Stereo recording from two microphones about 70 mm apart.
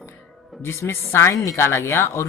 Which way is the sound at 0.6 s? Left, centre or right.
Left.